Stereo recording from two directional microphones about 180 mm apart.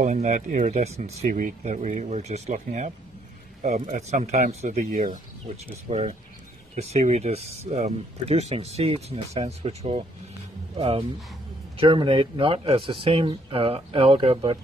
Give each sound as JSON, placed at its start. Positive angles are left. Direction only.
{"t": 0.0, "sound": "speech", "side_deg": -40}